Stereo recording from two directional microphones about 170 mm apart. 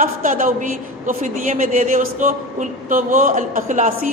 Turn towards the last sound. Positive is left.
turn(degrees=-45)  # may be behind; listen again after turning